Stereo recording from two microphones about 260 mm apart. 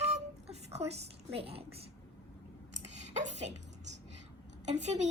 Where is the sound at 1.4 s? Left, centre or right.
Right.